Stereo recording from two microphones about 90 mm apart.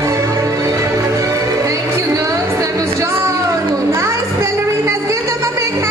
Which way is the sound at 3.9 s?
35° right (ahead or behind).